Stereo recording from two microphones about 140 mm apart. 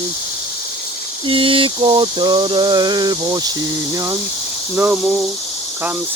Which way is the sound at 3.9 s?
20° right (ahead or behind).